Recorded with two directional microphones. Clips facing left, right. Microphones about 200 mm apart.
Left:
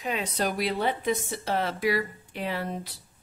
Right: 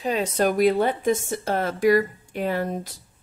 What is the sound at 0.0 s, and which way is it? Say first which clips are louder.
Speech: right 7 dB; 40° right (ahead or behind).